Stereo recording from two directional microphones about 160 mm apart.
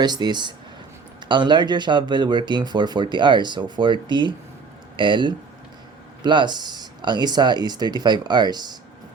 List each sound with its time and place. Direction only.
0.0 s speech: 25° right (ahead or behind)